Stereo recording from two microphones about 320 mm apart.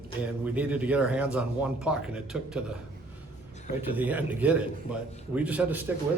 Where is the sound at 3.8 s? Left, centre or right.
Centre.